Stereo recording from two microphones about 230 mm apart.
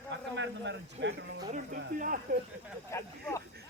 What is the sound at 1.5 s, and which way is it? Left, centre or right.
Speech, right.